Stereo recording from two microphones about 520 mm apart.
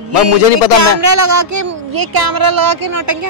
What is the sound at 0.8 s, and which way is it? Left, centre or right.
A woman's voice, right.